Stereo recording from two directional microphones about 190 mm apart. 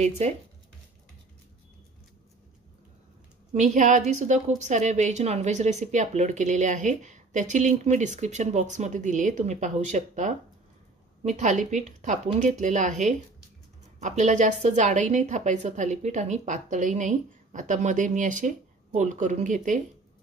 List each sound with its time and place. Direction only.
0.2 s a woman's voice: 35° right (ahead or behind)
3.5 s a woman's voice: 40° right (ahead or behind)